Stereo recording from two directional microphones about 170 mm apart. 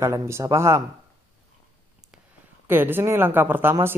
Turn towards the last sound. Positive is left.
turn(degrees=-10)  # may be behind; listen again after turning